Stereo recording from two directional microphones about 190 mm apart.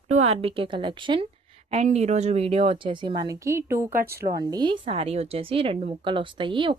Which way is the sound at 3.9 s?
55° right (ahead or behind).